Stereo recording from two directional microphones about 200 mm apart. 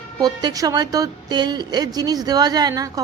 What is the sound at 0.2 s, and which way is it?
A woman's voice, 20° right (ahead or behind).